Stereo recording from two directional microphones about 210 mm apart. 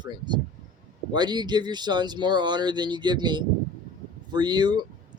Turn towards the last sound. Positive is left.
turn(degrees=-20)  # may be behind; listen again after turning